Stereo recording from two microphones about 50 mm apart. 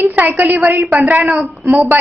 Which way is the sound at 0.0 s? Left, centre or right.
Right.